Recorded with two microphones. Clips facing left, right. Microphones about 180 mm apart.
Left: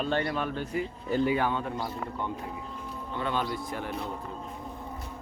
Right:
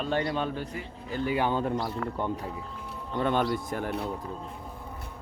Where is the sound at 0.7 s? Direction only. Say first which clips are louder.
Left 7 dB; 15° left (ahead or behind).